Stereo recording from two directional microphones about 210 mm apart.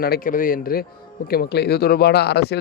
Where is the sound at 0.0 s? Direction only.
45° left (ahead or behind).